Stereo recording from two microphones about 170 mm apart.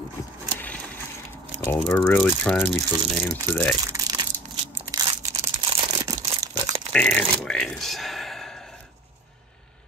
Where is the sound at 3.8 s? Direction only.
20° right (ahead or behind).